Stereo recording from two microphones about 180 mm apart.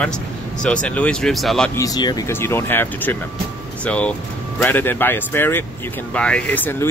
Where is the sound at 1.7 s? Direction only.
20° left (ahead or behind).